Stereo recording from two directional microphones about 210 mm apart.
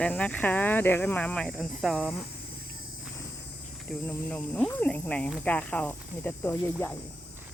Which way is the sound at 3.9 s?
10° left (ahead or behind).